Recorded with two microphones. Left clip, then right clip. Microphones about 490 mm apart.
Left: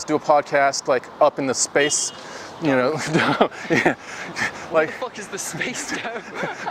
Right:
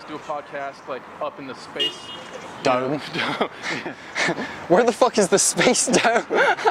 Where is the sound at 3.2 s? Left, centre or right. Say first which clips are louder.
Left 6 dB; left.